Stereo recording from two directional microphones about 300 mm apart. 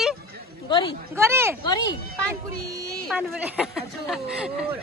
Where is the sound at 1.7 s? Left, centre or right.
Centre.